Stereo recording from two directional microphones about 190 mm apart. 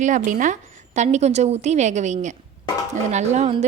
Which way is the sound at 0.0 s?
40° right (ahead or behind).